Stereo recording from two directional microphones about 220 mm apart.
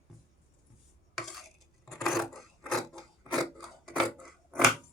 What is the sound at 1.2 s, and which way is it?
Cutlery, centre (ahead or behind).